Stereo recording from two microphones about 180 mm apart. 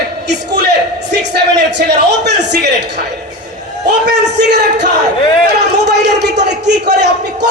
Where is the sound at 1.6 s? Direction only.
70° right (ahead or behind).